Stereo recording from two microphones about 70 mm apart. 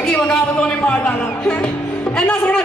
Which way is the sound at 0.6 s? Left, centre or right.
Centre.